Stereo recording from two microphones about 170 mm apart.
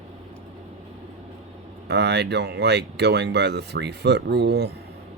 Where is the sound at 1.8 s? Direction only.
85° right.